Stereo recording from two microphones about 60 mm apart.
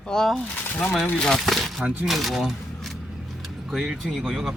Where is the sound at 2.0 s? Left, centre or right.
Centre.